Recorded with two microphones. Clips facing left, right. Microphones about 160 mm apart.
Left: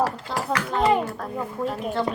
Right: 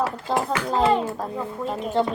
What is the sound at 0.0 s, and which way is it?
A child's voice, 25° right (ahead or behind).